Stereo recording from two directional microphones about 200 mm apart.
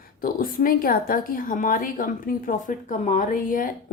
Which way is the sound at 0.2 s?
45° left (ahead or behind).